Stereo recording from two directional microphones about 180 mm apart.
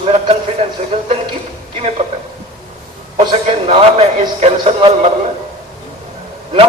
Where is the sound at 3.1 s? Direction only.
30° right (ahead or behind).